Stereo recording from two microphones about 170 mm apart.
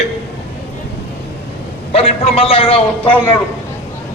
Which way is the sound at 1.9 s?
35° left (ahead or behind).